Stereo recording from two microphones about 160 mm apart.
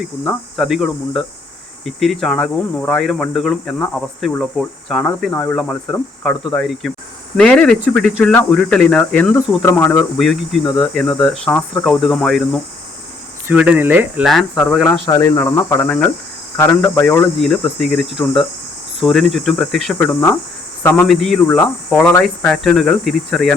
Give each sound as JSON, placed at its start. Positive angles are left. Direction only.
{"t": 0.3, "sound": "speech", "side_deg": 0}
{"t": 5.3, "sound": "speech", "side_deg": 15}
{"t": 13.5, "sound": "speech", "side_deg": -10}
{"t": 14.3, "sound": "speech", "side_deg": 0}
{"t": 17.4, "sound": "speech", "side_deg": 5}
{"t": 21.1, "sound": "speech", "side_deg": 0}
{"t": 21.9, "sound": "speech", "side_deg": 15}
{"t": 22.2, "sound": "speech", "side_deg": 5}